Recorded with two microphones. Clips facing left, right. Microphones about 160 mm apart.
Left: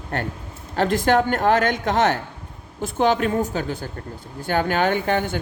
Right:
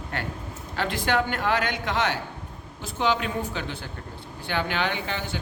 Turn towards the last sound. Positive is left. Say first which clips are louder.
# left 9 dB
turn(degrees=50)  # may be behind; listen again after turning